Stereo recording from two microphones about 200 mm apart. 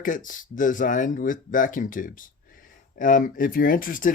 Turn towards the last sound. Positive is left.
turn(degrees=45)  # may be behind; listen again after turning